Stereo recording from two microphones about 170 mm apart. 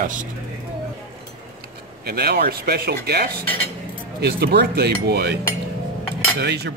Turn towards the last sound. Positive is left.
turn(degrees=-80)